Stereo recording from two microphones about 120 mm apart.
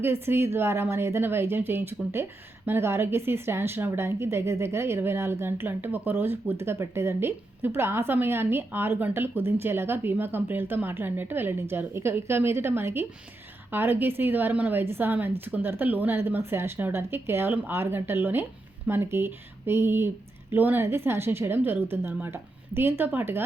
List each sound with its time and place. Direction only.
0.0 s a woman's voice: 20° right (ahead or behind)